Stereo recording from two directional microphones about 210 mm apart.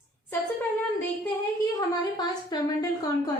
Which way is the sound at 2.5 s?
20° left (ahead or behind).